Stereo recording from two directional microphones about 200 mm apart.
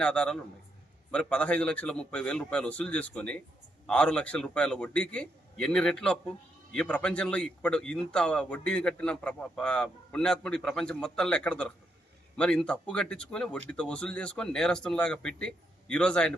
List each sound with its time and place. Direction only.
0.0 s a man's voice: 5° left (ahead or behind)